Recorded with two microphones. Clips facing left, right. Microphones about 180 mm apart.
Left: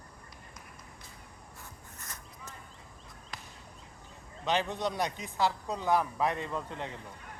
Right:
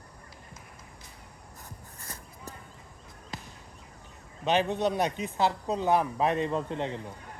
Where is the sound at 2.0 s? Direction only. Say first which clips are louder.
Right 2 dB; 35° right (ahead or behind).